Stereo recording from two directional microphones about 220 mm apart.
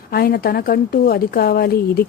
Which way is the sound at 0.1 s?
45° left (ahead or behind).